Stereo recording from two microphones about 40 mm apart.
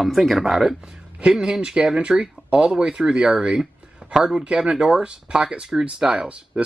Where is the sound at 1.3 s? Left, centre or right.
Centre.